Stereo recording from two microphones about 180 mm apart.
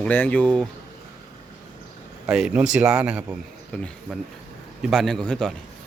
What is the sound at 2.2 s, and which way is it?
Speech, 5° right (ahead or behind).